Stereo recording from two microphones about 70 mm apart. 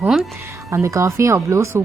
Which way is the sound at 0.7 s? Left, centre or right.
Right.